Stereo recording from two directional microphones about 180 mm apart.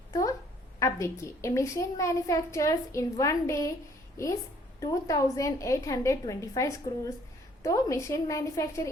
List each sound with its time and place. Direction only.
0.1 s a sound: 20° left (ahead or behind)
0.8 s a child's voice: 15° left (ahead or behind)
4.8 s a child's voice: 20° left (ahead or behind)